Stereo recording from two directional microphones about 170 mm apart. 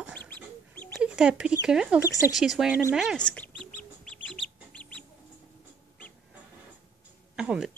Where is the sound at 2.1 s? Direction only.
20° left (ahead or behind).